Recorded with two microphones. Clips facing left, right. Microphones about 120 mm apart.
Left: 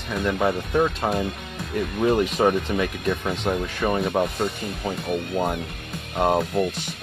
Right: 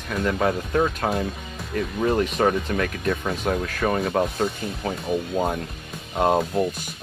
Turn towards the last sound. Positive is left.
turn(degrees=0)  # may be behind; listen again after turning